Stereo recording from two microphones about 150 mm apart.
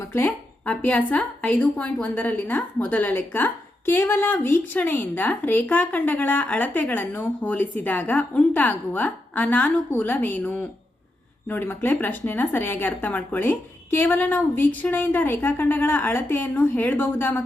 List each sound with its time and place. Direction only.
0.1 s speech: 10° left (ahead or behind)